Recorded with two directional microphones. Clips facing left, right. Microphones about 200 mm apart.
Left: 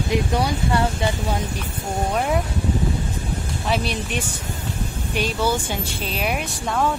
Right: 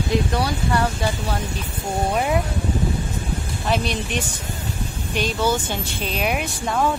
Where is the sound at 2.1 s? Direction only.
5° right (ahead or behind).